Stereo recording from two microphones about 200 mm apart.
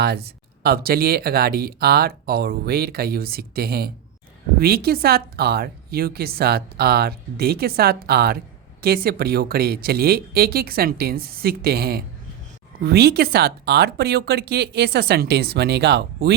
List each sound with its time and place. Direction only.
0.0 s speech: 55° right (ahead or behind)